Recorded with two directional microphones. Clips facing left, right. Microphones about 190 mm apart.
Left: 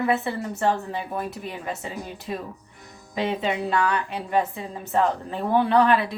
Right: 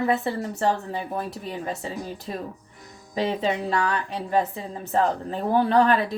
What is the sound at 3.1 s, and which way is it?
A woman's voice, 40° right (ahead or behind).